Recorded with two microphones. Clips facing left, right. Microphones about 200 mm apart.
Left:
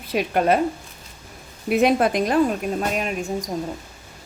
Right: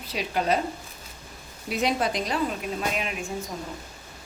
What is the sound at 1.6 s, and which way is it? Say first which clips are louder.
A woman's voice: left 8 dB; 55° left (ahead or behind).